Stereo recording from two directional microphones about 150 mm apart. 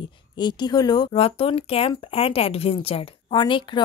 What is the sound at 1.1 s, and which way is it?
A woman's voice, 40° left (ahead or behind).